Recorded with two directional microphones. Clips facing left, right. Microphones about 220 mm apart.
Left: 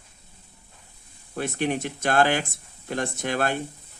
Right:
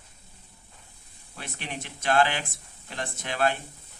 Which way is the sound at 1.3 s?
50° left (ahead or behind).